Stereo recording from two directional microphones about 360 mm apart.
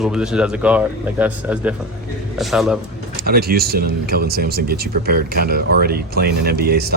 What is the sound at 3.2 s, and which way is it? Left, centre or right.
Speech, right.